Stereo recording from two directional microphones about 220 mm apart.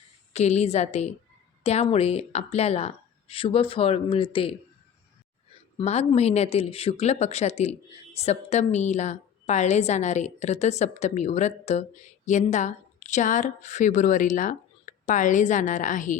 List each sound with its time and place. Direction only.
0.3 s speech: 30° left (ahead or behind)
5.7 s speech: 30° left (ahead or behind)